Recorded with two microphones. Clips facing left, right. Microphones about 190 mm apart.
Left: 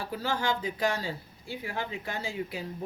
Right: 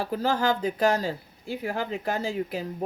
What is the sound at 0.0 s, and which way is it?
Speech, 40° right (ahead or behind).